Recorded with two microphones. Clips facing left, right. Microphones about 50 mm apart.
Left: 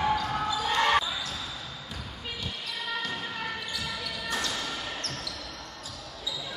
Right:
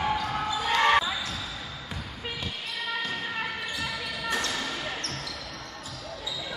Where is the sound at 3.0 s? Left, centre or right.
Right.